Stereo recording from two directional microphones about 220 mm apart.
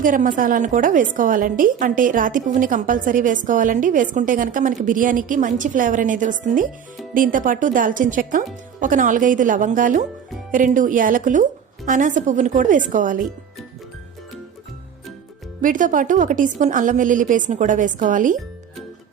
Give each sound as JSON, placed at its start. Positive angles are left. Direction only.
{"t": 0.0, "sound": "a woman's voice", "side_deg": -40}
{"t": 15.6, "sound": "a woman's voice", "side_deg": -35}